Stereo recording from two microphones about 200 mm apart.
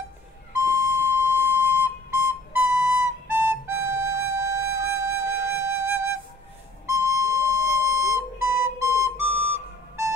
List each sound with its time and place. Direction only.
0.6 s flute: 15° right (ahead or behind)